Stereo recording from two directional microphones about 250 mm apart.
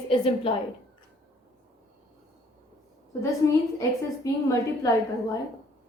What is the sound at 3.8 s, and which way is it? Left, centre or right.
A woman's voice, centre.